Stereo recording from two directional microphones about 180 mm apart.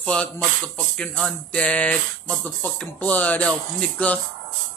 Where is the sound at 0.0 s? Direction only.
5° left (ahead or behind).